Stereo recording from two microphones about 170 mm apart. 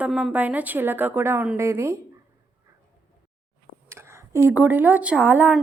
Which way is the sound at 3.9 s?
15° right (ahead or behind).